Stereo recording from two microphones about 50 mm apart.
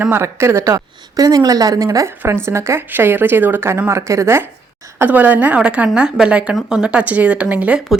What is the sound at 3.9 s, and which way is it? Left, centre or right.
Speech, right.